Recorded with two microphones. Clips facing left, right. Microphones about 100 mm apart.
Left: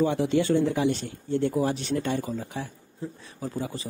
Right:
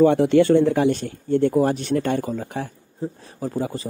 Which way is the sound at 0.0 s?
60° right (ahead or behind).